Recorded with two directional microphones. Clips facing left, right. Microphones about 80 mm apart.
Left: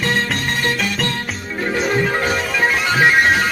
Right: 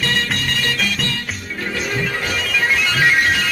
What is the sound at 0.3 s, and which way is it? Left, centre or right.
Music, left.